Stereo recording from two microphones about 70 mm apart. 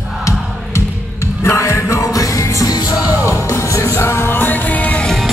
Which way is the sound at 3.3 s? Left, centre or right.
Left.